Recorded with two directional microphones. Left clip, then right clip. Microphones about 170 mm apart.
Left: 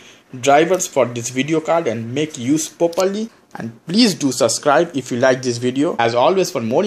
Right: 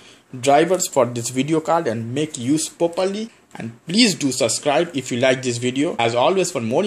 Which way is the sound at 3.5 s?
5° left (ahead or behind).